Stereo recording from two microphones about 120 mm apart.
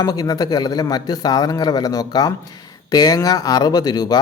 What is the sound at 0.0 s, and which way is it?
Speech, 30° left (ahead or behind).